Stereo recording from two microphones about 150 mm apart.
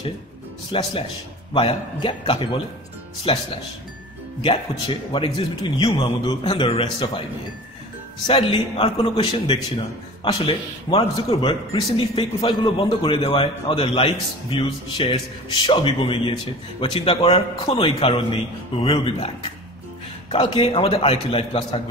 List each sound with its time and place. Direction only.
0.7 s a man's voice: 30° left (ahead or behind)
8.3 s a man's voice: 35° left (ahead or behind)